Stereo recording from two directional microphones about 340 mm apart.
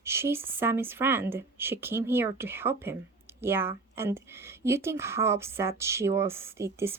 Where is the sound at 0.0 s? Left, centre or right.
Centre.